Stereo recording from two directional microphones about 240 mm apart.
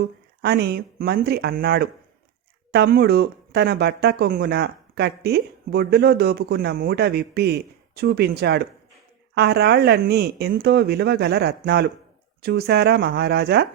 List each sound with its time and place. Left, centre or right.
0.0 s speech: right